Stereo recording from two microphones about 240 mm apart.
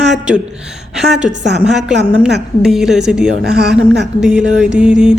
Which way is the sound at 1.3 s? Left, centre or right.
Right.